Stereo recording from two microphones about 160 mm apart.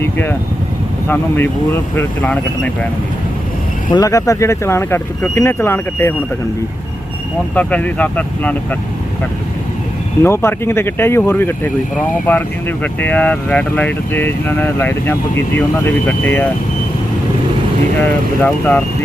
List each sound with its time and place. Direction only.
0.0 s speech: 15° left (ahead or behind)
3.9 s speech: 20° left (ahead or behind)
7.5 s speech: 10° left (ahead or behind)
10.2 s speech: 15° left (ahead or behind)
18.4 s speech: 10° left (ahead or behind)